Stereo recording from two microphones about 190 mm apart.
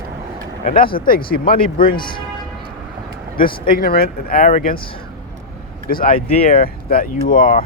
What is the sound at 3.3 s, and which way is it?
Speech, 50° left (ahead or behind).